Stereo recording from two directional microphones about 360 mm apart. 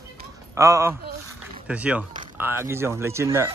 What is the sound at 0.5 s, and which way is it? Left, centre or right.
Speech, centre.